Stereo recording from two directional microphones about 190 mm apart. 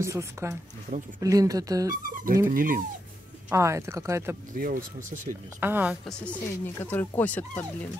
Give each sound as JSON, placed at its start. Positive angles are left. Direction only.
{"t": 0.0, "sound": "speech", "side_deg": -15}
{"t": 2.5, "sound": "speech", "side_deg": -45}
{"t": 3.4, "sound": "speech", "side_deg": -15}
{"t": 4.6, "sound": "speech", "side_deg": -50}
{"t": 5.6, "sound": "speech", "side_deg": -10}
{"t": 6.0, "sound": "speech", "side_deg": 10}